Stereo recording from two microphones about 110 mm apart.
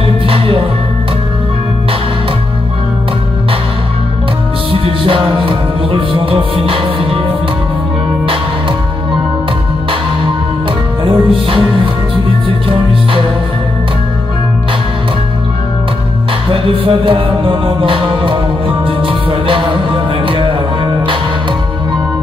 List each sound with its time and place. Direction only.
0.3 s music: 55° right (ahead or behind)
4.7 s music: 55° right (ahead or behind)
11.1 s music: 55° right (ahead or behind)
16.4 s music: 55° right (ahead or behind)